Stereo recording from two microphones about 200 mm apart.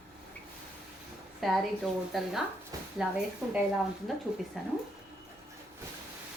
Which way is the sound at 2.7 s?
15° right (ahead or behind).